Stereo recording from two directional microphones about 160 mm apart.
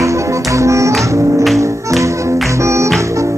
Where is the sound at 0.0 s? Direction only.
20° right (ahead or behind).